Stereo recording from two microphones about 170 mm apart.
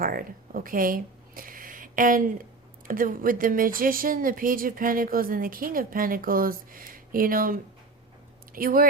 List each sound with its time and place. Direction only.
0.0 s a woman's voice: 55° right (ahead or behind)